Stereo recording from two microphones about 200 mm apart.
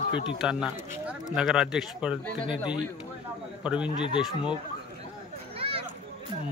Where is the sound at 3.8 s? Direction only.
25° left (ahead or behind).